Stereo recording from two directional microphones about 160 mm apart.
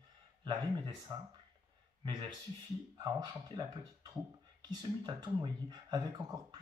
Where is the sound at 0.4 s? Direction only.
30° right (ahead or behind).